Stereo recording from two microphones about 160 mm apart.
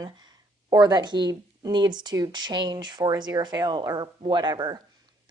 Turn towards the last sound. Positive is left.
turn(degrees=-30)  # may be behind; listen again after turning